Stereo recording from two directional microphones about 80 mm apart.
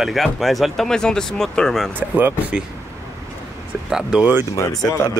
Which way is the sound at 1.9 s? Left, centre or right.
Right.